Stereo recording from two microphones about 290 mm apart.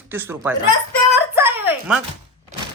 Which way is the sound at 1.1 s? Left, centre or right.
Centre.